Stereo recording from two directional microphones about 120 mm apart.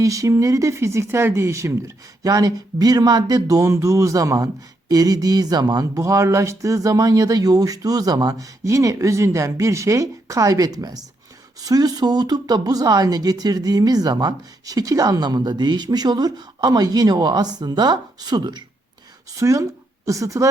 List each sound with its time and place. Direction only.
0.0 s speech: 25° right (ahead or behind)